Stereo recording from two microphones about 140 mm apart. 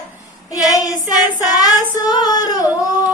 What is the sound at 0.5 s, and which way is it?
Female singing, 25° left (ahead or behind).